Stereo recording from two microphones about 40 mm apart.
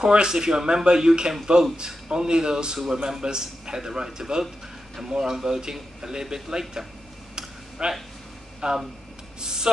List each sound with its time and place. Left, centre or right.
0.0 s a man's voice: centre
7.8 s a man's voice: right
9.4 s a sound: centre